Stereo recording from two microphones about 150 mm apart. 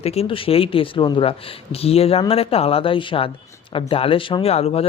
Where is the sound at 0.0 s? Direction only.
40° left (ahead or behind).